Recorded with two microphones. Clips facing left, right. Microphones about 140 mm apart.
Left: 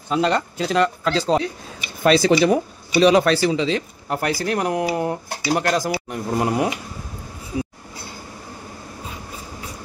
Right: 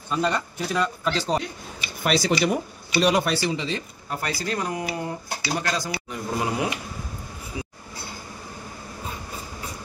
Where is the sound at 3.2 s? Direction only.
90° left; by 6.2 s 55° left (ahead or behind).